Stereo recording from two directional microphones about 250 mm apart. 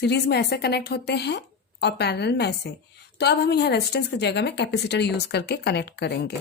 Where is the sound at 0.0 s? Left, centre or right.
Left.